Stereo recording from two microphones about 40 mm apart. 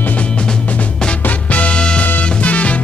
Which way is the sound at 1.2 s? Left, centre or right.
Left.